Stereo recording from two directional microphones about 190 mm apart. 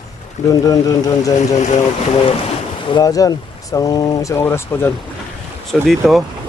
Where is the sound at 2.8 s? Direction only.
20° left (ahead or behind).